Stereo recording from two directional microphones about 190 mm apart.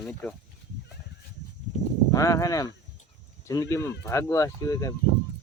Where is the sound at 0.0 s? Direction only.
5° left (ahead or behind).